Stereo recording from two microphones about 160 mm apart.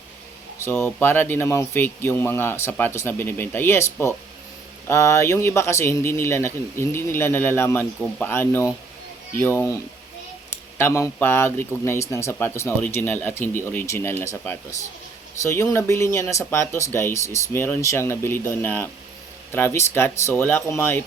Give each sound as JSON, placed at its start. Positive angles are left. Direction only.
{"t": 0.6, "sound": "a man's voice", "side_deg": 15}
{"t": 10.8, "sound": "a man's voice", "side_deg": 15}